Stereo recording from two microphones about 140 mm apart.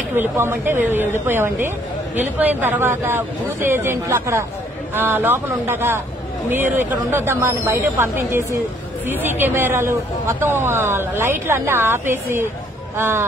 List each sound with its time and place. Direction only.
0.1 s speech: 15° right (ahead or behind)